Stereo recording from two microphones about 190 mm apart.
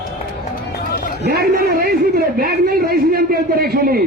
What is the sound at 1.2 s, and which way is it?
A man's voice, 60° right (ahead or behind).